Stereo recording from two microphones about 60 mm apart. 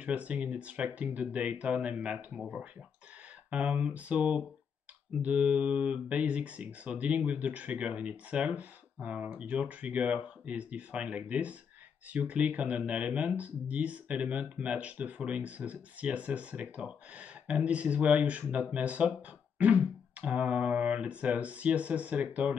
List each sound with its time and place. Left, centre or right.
0.0 s speech: right
3.4 s speech: right